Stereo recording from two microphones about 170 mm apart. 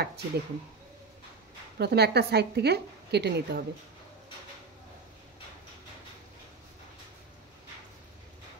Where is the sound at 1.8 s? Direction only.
75° right (ahead or behind).